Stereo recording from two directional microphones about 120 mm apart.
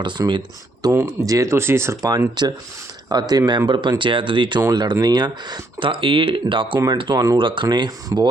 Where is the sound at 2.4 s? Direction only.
35° right (ahead or behind).